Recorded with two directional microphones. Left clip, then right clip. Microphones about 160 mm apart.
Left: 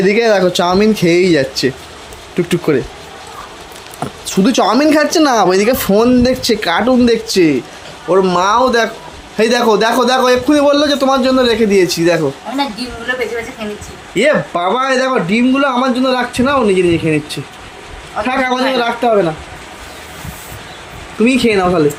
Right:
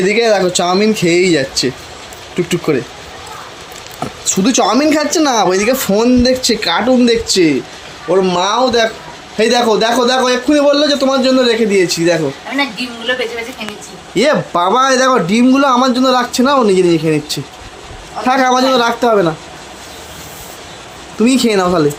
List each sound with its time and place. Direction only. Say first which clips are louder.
0.0 s speech: left 1 dB; 5° left (ahead or behind)
4.0 s speech: even; centre (ahead or behind)
14.2 s a man's voice: even; 20° right (ahead or behind)
18.3 s speech: right 4 dB; 30° right (ahead or behind)
21.2 s a man's voice: even; 10° right (ahead or behind)